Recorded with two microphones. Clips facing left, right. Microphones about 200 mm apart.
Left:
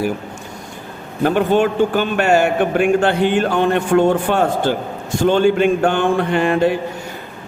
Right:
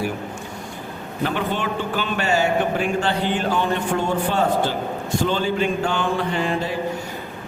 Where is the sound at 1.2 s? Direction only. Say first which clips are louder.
Left 9 dB; 50° left (ahead or behind).